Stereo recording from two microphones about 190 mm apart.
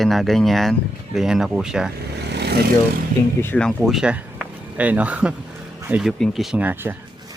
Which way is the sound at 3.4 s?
5° left (ahead or behind).